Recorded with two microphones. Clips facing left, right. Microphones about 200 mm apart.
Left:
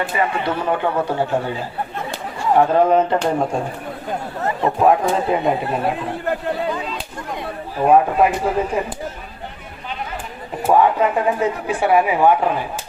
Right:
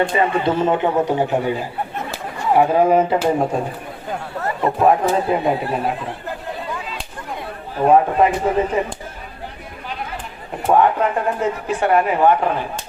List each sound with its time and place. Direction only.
0.1 s a man's voice: 25° right (ahead or behind); by 3.6 s 5° right (ahead or behind)
4.8 s speech: centre (ahead or behind)
7.8 s speech: 5° left (ahead or behind)
10.6 s speech: 5° left (ahead or behind)